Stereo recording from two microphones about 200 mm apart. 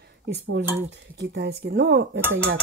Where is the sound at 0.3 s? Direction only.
65° right (ahead or behind).